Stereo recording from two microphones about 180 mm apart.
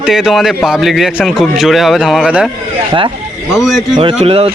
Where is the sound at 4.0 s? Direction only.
30° right (ahead or behind).